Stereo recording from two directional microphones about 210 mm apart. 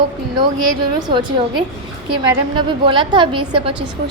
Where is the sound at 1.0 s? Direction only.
20° right (ahead or behind).